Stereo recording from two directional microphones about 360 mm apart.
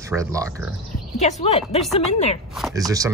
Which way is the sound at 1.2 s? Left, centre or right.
Centre.